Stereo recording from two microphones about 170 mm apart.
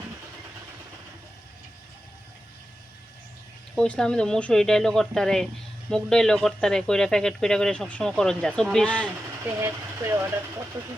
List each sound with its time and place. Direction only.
3.8 s speech: 5° left (ahead or behind)
9.6 s speech: 15° right (ahead or behind)